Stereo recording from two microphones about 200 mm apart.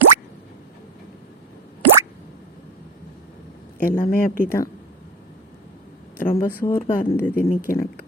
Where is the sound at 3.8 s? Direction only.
45° left (ahead or behind).